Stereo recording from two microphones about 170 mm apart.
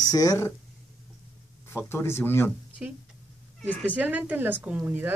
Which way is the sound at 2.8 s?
5° right (ahead or behind).